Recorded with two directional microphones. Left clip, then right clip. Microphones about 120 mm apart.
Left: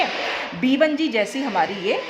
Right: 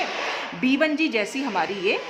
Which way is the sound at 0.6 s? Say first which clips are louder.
Left 2 dB; 15° left (ahead or behind).